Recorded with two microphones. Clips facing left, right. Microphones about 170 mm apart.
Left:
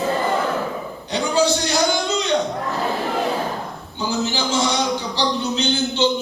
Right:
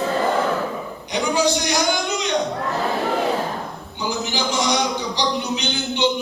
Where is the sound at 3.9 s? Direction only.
15° right (ahead or behind).